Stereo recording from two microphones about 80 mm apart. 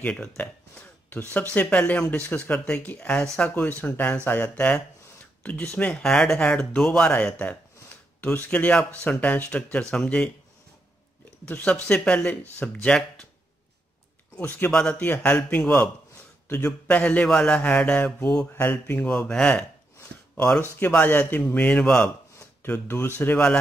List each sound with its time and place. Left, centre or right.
0.0 s speech: centre
11.4 s speech: centre
14.7 s speech: centre
16.4 s a man's voice: left
16.8 s speech: centre
19.0 s speech: centre
22.6 s speech: left
23.3 s speech: centre